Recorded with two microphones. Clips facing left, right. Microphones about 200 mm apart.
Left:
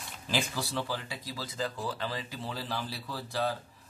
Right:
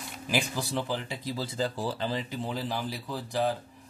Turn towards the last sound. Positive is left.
turn(degrees=-15)  # may be behind; listen again after turning